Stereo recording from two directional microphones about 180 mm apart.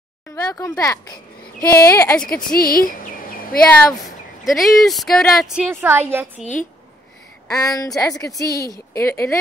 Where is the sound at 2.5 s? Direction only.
55° left (ahead or behind).